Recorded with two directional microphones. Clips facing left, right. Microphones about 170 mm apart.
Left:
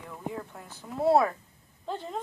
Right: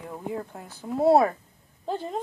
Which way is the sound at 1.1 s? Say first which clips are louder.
Right 3 dB; 25° right (ahead or behind).